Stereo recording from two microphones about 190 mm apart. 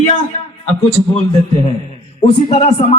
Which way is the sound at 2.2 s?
30° left (ahead or behind).